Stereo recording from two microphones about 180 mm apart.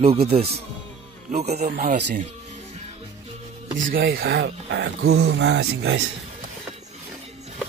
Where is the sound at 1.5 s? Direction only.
55° right (ahead or behind).